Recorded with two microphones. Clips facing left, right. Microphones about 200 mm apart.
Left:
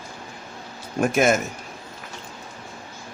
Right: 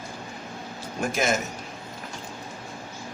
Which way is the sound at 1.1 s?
55° left (ahead or behind).